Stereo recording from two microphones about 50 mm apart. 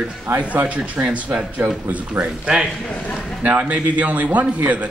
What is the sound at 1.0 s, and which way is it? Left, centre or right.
Speech, right.